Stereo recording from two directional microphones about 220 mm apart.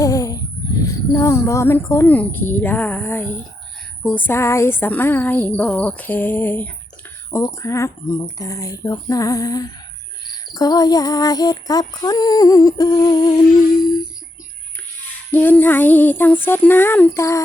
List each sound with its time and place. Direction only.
0.0 s a sound: 15° left (ahead or behind)
1.1 s music: 15° left (ahead or behind)
15.3 s music: 10° left (ahead or behind)